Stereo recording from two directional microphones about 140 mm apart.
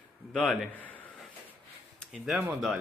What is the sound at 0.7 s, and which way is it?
Speech, 10° left (ahead or behind).